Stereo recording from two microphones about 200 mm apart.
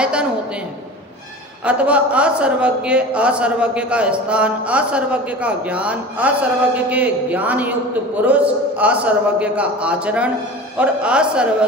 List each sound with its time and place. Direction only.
0.0 s a man's voice: 5° right (ahead or behind)
1.6 s a man's voice: 5° right (ahead or behind)